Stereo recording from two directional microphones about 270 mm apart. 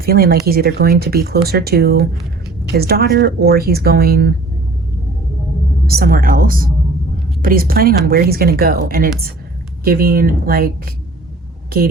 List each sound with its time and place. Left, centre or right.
0.0 s speech: right
5.8 s speech: right